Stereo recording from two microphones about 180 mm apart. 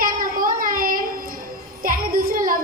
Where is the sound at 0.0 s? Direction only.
50° right (ahead or behind).